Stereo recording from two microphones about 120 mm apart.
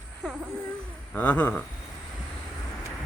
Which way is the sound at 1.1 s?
15° left (ahead or behind).